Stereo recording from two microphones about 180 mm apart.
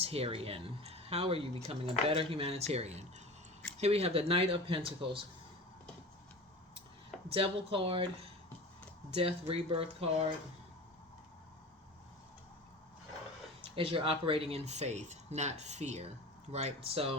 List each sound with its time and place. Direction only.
0.0 s speech: 35° right (ahead or behind)
7.3 s speech: 30° right (ahead or behind)
13.7 s speech: 30° right (ahead or behind)